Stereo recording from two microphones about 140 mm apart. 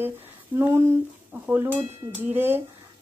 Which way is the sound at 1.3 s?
15° right (ahead or behind).